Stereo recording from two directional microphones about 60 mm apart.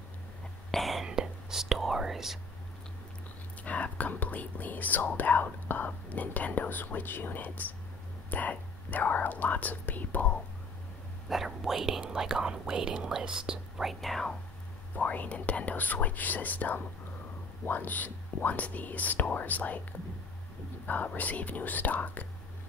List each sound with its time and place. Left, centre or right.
0.7 s whispering: centre
1.0 s speech: centre
3.6 s speech: left
11.2 s speech: centre
13.8 s speech: centre
15.0 s speech: left
20.8 s speech: left